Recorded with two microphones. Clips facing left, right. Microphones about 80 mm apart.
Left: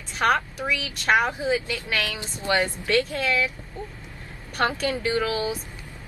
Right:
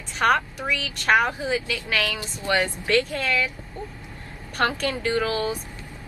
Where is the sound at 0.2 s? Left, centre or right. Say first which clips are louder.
Right 1 dB; centre.